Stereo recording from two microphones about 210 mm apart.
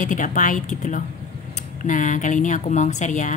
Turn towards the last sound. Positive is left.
turn(degrees=35)  # may be behind; listen again after turning